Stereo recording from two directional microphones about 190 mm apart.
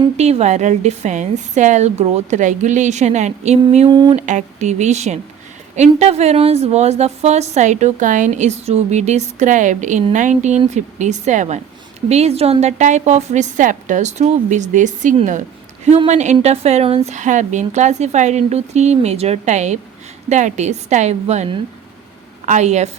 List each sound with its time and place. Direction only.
0.2 s a woman's voice: 35° right (ahead or behind)
4.1 s a woman's voice: 40° right (ahead or behind)